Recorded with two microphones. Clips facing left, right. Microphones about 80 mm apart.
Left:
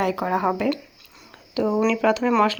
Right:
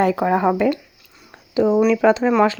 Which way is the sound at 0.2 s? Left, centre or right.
Right.